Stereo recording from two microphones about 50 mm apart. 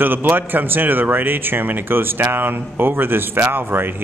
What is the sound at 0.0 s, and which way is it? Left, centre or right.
A man's voice, right.